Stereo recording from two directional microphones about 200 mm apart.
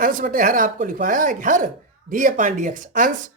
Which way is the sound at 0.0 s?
45° right (ahead or behind).